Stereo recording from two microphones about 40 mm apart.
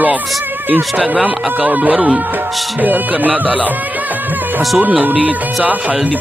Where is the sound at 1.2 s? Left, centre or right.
Right.